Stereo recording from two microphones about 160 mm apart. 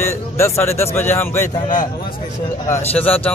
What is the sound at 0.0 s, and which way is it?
Speech, 15° left (ahead or behind).